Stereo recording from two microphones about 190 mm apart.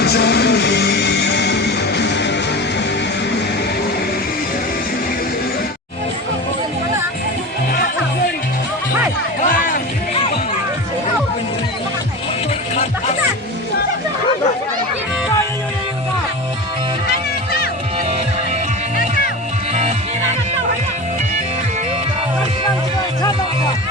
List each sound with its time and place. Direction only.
0.0 s music: 60° left (ahead or behind)
9.4 s music: 45° left (ahead or behind)